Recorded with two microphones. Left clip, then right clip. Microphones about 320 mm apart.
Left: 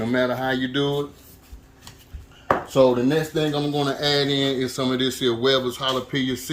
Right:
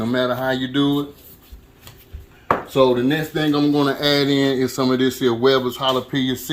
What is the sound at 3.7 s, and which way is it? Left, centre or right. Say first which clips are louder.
A man's voice: right 4 dB; centre.